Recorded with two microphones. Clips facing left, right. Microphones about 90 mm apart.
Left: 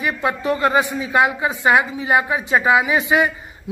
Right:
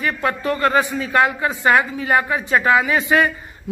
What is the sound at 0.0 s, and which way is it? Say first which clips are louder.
A woman's voice: even; 15° left (ahead or behind).